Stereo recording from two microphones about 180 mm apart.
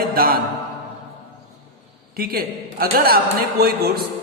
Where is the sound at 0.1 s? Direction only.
55° right (ahead or behind).